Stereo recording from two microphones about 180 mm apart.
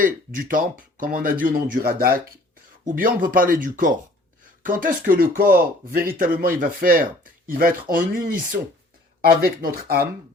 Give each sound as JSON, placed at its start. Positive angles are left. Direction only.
{"t": 0.0, "sound": "speech", "side_deg": -50}
{"t": 9.4, "sound": "speech", "side_deg": -55}